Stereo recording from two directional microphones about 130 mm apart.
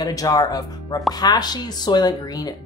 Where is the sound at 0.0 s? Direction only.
30° left (ahead or behind).